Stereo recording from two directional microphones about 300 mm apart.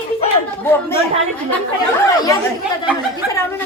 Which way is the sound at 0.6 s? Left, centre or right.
Centre.